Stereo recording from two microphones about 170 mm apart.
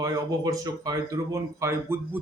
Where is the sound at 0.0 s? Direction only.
20° right (ahead or behind).